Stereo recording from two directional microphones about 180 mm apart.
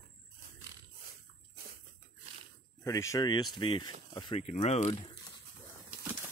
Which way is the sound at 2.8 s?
20° left (ahead or behind).